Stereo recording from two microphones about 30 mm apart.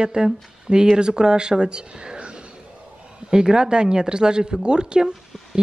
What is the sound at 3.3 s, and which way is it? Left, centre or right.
Speech, right.